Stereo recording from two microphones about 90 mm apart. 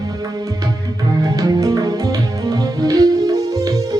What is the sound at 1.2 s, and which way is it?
Music, 45° right (ahead or behind).